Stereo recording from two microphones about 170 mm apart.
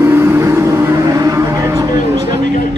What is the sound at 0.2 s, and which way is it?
Vehicle, 15° right (ahead or behind).